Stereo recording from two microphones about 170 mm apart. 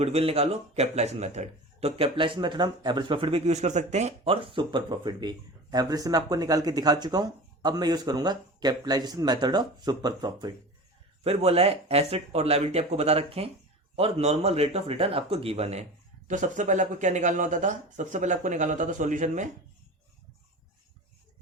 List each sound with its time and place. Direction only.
0.0 s speech: 35° right (ahead or behind)
11.2 s speech: 35° right (ahead or behind)